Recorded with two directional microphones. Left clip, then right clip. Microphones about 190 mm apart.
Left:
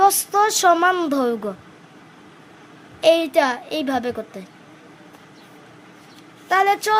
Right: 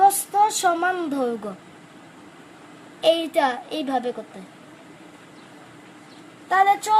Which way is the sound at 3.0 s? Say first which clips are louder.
Left 3 dB; 30° left (ahead or behind).